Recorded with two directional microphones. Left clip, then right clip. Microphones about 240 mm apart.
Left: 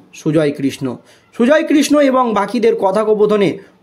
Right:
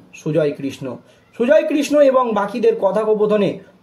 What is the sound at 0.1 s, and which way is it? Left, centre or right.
A man's voice, left.